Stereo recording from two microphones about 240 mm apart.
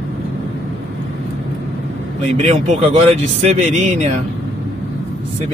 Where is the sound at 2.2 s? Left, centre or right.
Right.